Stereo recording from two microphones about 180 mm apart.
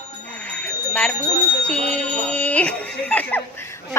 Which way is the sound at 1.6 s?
5° left (ahead or behind).